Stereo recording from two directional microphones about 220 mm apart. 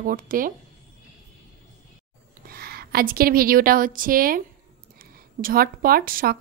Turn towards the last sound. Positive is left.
turn(degrees=-40)  # may be behind; listen again after turning